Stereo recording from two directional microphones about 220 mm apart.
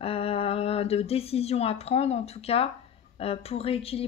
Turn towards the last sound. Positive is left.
turn(degrees=25)  # may be behind; listen again after turning